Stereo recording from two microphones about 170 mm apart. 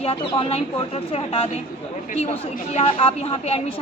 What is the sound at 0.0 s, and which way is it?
Speech, 30° left (ahead or behind).